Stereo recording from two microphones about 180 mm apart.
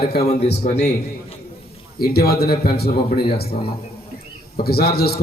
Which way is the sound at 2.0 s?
60° left (ahead or behind).